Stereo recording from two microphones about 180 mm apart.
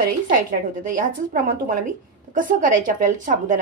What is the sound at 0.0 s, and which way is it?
A woman's voice, 50° right (ahead or behind).